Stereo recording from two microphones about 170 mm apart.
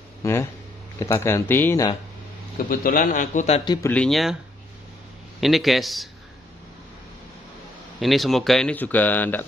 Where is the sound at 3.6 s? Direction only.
25° left (ahead or behind).